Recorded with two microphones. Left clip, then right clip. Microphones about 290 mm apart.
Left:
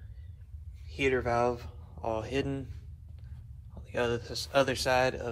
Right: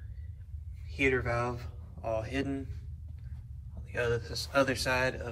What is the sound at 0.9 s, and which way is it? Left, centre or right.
Speech, centre.